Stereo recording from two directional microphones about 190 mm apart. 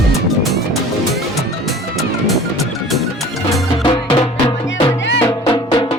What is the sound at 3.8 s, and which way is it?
Music, 25° left (ahead or behind).